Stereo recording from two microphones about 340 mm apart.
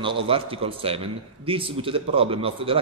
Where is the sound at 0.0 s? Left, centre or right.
Centre.